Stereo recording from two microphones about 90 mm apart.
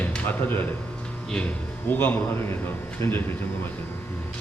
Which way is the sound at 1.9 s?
20° left (ahead or behind).